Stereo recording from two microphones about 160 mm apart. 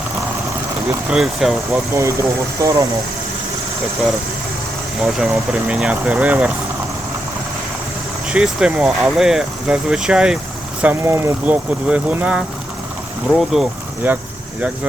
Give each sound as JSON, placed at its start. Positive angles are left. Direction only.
{"t": 1.1, "sound": "speech", "side_deg": 0}
{"t": 2.6, "sound": "speech", "side_deg": -20}
{"t": 5.0, "sound": "speech", "side_deg": -5}
{"t": 8.3, "sound": "speech", "side_deg": -5}
{"t": 10.8, "sound": "speech", "side_deg": -15}